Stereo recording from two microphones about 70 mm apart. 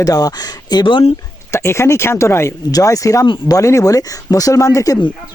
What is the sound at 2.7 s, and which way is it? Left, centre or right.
Speech, left.